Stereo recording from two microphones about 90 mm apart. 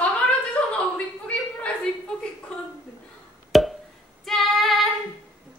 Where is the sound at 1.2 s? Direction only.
10° left (ahead or behind).